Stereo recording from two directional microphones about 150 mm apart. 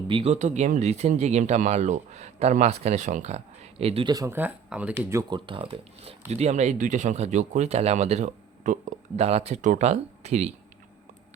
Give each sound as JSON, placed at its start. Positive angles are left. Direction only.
{"t": 0.1, "sound": "speech", "side_deg": -35}
{"t": 0.3, "sound": "speech", "side_deg": -50}
{"t": 4.1, "sound": "speech", "side_deg": -25}
{"t": 4.4, "sound": "speech", "side_deg": -10}
{"t": 5.3, "sound": "speech", "side_deg": -35}